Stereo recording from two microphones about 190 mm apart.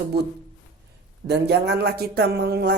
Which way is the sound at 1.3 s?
60° right (ahead or behind).